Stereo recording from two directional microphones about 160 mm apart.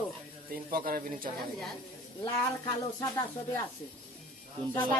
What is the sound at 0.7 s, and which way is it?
Speech, 60° right (ahead or behind).